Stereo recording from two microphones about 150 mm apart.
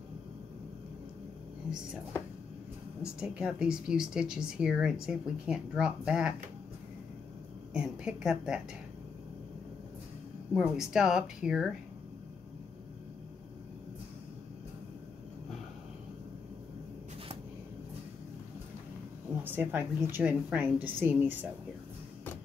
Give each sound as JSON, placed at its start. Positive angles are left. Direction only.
{"t": 3.0, "sound": "speech", "side_deg": -5}
{"t": 7.7, "sound": "speech", "side_deg": -5}
{"t": 10.5, "sound": "speech", "side_deg": -5}
{"t": 19.3, "sound": "a woman's voice", "side_deg": -10}